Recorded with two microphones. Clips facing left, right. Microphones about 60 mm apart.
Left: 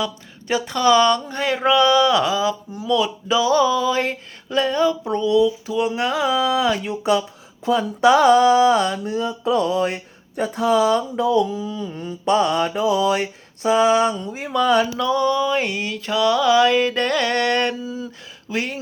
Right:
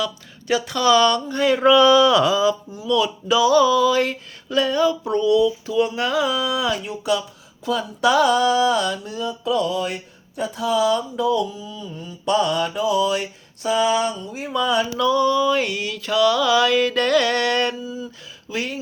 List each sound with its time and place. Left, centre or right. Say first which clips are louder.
0.0 s speech: even; left
6.0 s speech: left 1 dB; left
12.2 s speech: left 2 dB; left
14.4 s speech: left 3 dB; left
17.8 s speech: left 1 dB; left
18.5 s speech: left 2 dB; left